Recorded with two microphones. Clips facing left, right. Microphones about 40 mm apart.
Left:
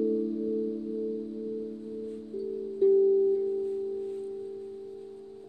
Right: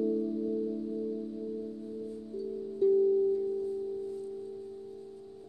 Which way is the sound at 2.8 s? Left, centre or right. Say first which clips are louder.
Left 3 dB; centre.